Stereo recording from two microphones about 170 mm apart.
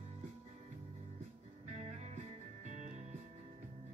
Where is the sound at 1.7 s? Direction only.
40° right (ahead or behind).